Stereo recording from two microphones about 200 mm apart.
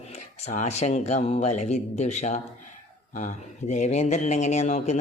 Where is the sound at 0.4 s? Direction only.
35° left (ahead or behind).